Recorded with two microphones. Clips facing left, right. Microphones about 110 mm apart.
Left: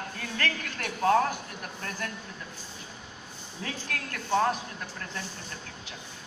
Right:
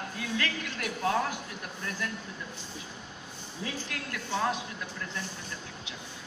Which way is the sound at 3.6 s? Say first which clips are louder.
Left 1 dB; 50° left (ahead or behind).